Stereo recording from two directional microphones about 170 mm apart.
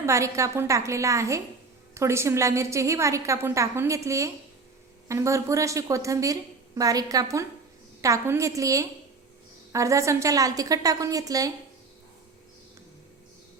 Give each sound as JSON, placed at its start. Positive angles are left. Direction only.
{"t": 0.0, "sound": "a woman's voice", "side_deg": -15}